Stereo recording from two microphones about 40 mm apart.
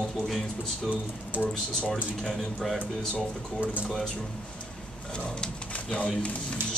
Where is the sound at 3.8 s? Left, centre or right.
Centre.